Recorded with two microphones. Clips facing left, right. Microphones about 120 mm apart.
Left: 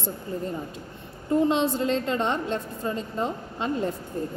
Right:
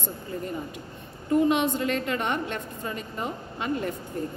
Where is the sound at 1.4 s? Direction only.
30° left (ahead or behind).